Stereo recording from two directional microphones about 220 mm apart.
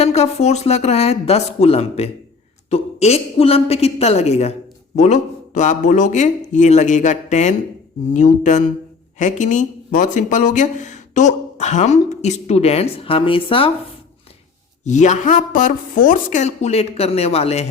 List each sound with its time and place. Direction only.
0.0 s speech: 30° left (ahead or behind)
14.8 s speech: 35° left (ahead or behind)